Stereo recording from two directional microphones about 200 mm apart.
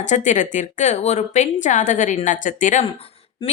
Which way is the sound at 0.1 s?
40° left (ahead or behind).